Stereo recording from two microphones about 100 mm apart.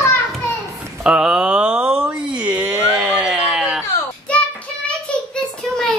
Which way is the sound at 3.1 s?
5° right (ahead or behind).